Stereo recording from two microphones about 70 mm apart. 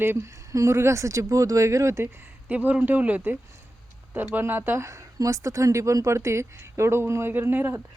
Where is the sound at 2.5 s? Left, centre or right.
Right.